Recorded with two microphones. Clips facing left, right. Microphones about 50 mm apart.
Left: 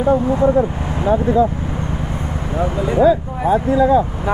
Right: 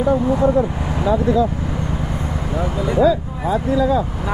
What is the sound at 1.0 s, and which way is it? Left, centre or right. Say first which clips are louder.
Speech: left 1 dB; left.